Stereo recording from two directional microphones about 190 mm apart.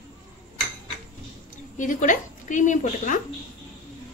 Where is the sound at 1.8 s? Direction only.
40° left (ahead or behind).